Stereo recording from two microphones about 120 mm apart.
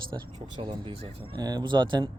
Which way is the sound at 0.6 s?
45° right (ahead or behind).